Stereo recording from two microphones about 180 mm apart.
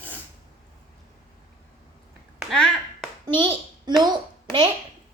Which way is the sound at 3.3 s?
25° right (ahead or behind).